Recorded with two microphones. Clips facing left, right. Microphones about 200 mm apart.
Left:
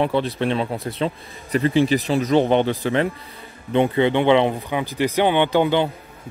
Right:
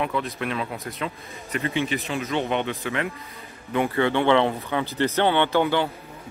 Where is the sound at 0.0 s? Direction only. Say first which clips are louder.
Left 6 dB; 30° left (ahead or behind).